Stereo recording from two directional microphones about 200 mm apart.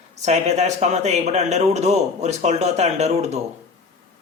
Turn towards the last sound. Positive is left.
turn(degrees=-35)  # may be behind; listen again after turning